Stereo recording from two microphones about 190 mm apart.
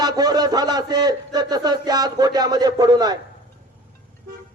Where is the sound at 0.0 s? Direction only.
20° right (ahead or behind).